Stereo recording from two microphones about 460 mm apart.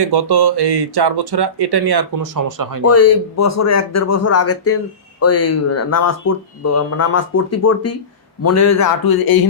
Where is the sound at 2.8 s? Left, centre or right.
Left.